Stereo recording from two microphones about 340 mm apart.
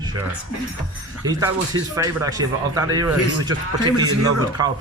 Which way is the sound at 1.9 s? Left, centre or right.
Centre.